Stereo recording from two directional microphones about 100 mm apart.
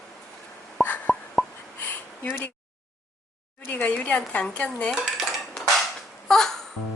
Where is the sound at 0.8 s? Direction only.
15° left (ahead or behind).